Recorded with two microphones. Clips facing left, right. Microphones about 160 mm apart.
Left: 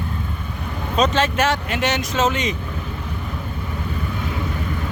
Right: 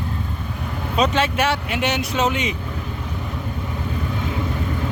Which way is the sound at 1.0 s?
10° right (ahead or behind).